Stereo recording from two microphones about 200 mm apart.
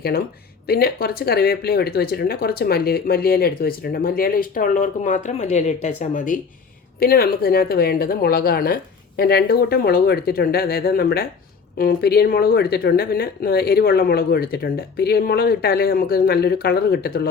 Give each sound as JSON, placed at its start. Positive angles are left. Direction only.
{"t": 0.7, "sound": "speech", "side_deg": 50}